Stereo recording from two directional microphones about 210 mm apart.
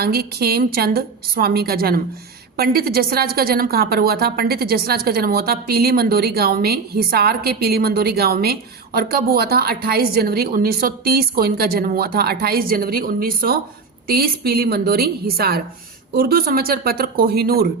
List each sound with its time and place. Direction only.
0.0 s a woman's voice: 50° right (ahead or behind)